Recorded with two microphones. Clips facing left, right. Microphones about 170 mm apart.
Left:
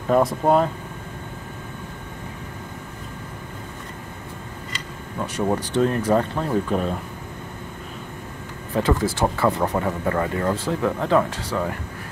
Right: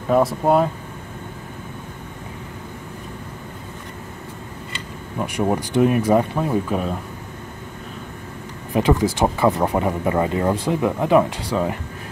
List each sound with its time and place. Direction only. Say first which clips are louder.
0.1 s speech: right 1 dB; centre (ahead or behind)
5.2 s speech: right 2 dB; 15° right (ahead or behind)
8.7 s speech: right 3 dB; 15° right (ahead or behind)